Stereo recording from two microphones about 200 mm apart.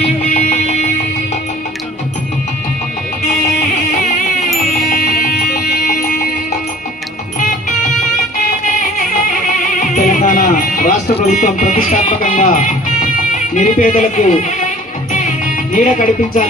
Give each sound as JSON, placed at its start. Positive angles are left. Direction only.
{"t": 0.0, "sound": "music", "side_deg": 35}
{"t": 4.9, "sound": "music", "side_deg": 45}
{"t": 9.8, "sound": "music", "side_deg": 40}
{"t": 13.6, "sound": "speech", "side_deg": 40}
{"t": 15.1, "sound": "music", "side_deg": 40}